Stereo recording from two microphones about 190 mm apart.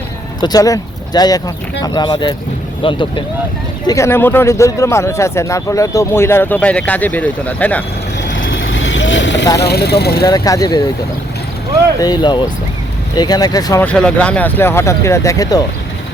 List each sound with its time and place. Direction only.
0.4 s speech: 20° left (ahead or behind)
3.8 s speech: 15° left (ahead or behind)
8.3 s vehicle: 80° left
9.6 s speech: 55° left (ahead or behind)
10.2 s speech: 20° left (ahead or behind)
11.9 s speech: 20° left (ahead or behind)
13.8 s speech: 5° left (ahead or behind)